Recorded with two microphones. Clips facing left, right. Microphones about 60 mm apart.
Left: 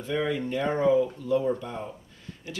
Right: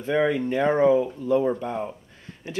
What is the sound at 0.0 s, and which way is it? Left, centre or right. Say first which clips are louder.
Speech: right 6 dB; right.